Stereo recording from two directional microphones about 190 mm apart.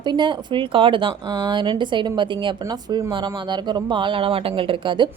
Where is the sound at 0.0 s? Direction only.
25° right (ahead or behind).